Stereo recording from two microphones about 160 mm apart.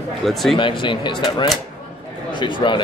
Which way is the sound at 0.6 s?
30° left (ahead or behind).